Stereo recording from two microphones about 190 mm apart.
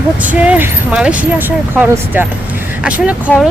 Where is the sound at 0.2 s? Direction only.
10° right (ahead or behind).